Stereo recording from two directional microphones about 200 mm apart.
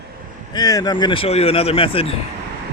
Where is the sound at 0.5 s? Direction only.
20° left (ahead or behind).